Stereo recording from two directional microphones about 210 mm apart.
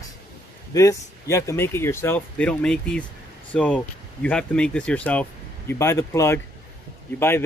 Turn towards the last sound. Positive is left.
turn(degrees=10)  # may be behind; listen again after turning